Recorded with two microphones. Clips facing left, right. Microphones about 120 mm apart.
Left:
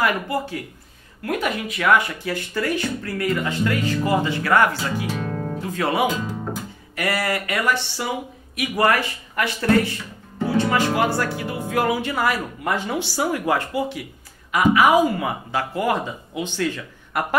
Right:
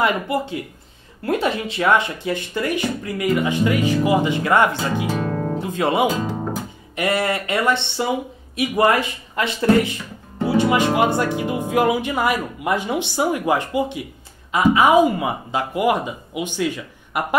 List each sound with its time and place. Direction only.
0.0 s a man's voice: 20° right (ahead or behind)
5.1 s guitar: 40° right (ahead or behind)
5.6 s a man's voice: 20° right (ahead or behind)
6.0 s speech: 35° right (ahead or behind)
7.0 s a man's voice: 25° right (ahead or behind)